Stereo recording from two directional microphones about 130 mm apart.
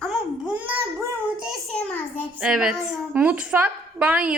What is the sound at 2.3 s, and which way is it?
A woman's voice, 5° right (ahead or behind).